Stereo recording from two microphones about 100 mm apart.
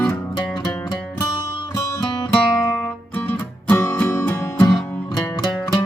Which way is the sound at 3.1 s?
20° left (ahead or behind).